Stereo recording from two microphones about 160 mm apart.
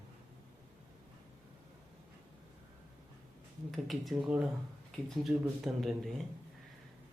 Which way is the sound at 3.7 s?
Centre (ahead or behind).